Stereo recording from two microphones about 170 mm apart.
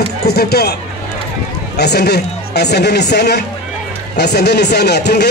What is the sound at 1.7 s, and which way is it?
Speech, 75° left (ahead or behind).